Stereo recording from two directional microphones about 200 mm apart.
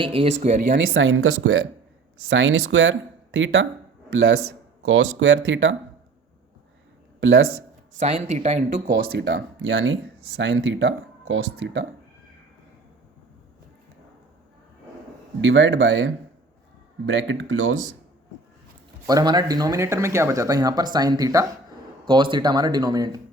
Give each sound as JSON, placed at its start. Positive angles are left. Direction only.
{"t": 0.0, "sound": "speech", "side_deg": -30}
{"t": 0.9, "sound": "speech", "side_deg": -75}
{"t": 2.3, "sound": "speech", "side_deg": -75}
{"t": 3.3, "sound": "speech", "side_deg": -65}
{"t": 4.8, "sound": "speech", "side_deg": -85}
{"t": 7.2, "sound": "speech", "side_deg": -65}
{"t": 7.9, "sound": "speech", "side_deg": -35}
{"t": 8.7, "sound": "speech", "side_deg": -50}
{"t": 15.4, "sound": "speech", "side_deg": -65}
{"t": 19.0, "sound": "speech", "side_deg": -20}